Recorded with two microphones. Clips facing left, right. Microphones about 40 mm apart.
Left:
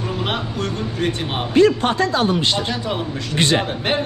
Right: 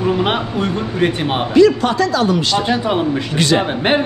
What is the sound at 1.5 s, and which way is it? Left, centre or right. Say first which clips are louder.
Speech: right 3 dB; left.